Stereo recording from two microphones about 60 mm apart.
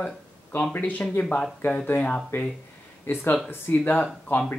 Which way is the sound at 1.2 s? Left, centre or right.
Centre.